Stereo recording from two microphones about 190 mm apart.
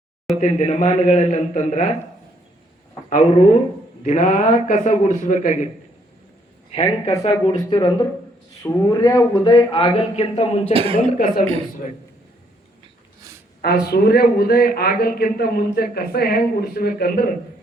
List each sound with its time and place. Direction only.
0.3 s a man's voice: 35° left (ahead or behind)
3.1 s a man's voice: 40° left (ahead or behind)
6.7 s a man's voice: 35° left (ahead or behind)
10.9 s a man's voice: 45° left (ahead or behind)
13.8 s a man's voice: 55° left (ahead or behind)